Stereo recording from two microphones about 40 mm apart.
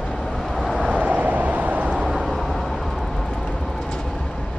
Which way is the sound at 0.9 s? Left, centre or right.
Right.